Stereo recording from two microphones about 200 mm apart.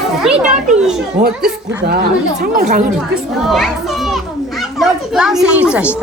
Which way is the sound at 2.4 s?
50° right (ahead or behind).